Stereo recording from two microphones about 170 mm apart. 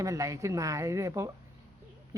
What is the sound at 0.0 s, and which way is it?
A woman's voice, 20° right (ahead or behind).